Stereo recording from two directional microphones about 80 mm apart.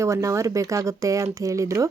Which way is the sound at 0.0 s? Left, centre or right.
Right.